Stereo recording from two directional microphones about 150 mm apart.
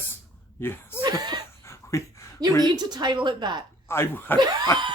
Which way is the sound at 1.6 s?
20° left (ahead or behind).